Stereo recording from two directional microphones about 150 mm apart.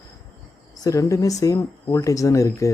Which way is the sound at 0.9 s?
20° left (ahead or behind).